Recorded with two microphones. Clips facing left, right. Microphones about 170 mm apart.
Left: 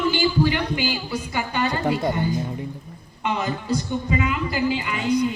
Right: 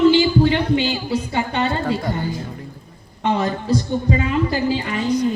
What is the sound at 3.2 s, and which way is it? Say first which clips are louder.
A woman's voice: right 5 dB; 35° right (ahead or behind).